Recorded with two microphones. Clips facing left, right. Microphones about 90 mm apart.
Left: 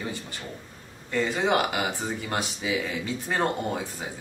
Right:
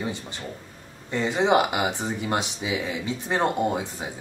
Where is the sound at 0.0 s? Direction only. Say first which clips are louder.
Right 3 dB; 20° right (ahead or behind).